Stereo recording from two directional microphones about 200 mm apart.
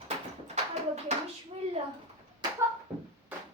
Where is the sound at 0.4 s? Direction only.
35° right (ahead or behind).